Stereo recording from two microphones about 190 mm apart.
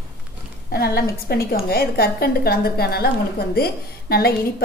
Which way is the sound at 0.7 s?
55° left (ahead or behind).